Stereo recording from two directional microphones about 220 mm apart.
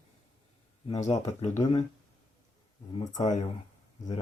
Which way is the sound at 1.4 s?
30° left (ahead or behind).